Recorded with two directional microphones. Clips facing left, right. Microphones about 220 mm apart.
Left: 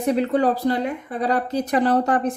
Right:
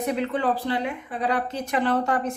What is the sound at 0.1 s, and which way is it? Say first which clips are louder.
Speech: left 7 dB; 40° left (ahead or behind).